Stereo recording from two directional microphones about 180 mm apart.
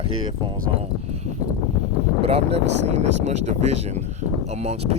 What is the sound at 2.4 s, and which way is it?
Speech, 75° right (ahead or behind).